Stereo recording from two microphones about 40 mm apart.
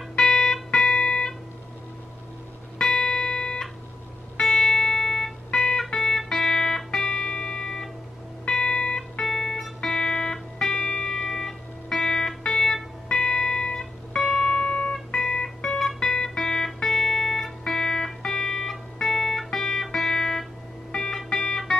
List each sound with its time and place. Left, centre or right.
0.2 s music: centre
2.8 s music: centre
8.7 s music: left
9.2 s music: centre
14.5 s music: centre
15.1 s music: centre
15.9 s music: centre
16.2 s music: centre